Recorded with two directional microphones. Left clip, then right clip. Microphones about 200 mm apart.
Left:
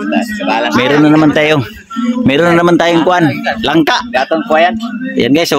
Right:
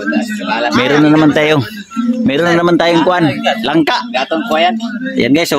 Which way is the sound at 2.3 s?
10° left (ahead or behind).